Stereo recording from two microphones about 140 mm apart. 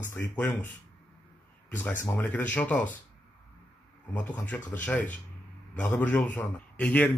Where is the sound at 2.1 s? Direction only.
10° left (ahead or behind).